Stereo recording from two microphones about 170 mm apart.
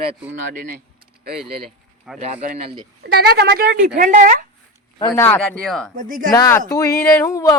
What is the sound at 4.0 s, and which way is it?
Speech, 50° right (ahead or behind).